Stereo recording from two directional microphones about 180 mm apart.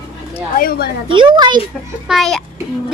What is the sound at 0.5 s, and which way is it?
Speech, 55° left (ahead or behind).